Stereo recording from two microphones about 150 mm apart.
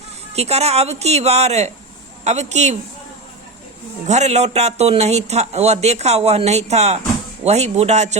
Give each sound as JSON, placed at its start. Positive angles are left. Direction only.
{"t": 0.3, "sound": "speech", "side_deg": -45}
{"t": 4.0, "sound": "speech", "side_deg": -50}